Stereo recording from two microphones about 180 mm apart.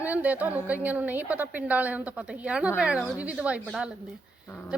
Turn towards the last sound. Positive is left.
turn(degrees=-5)  # may be behind; listen again after turning